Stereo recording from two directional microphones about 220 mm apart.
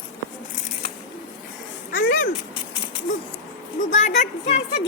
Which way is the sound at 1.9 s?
40° left (ahead or behind).